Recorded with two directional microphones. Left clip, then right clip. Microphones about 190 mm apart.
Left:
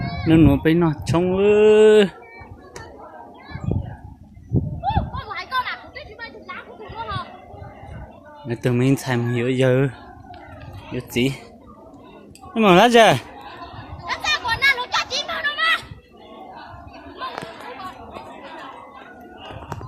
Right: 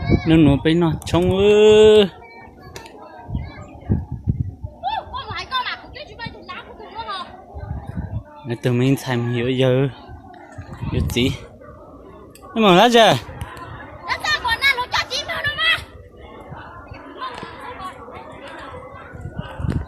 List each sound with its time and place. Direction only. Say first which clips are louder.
0.3 s speech: even; 5° left (ahead or behind)
4.8 s a sound: right 2 dB; 40° right (ahead or behind)
8.4 s speech: even; centre (ahead or behind)
10.9 s speech: right 1 dB; centre (ahead or behind)
12.5 s speech: even; 5° right (ahead or behind)
14.1 s a sound: right 2 dB; 10° right (ahead or behind)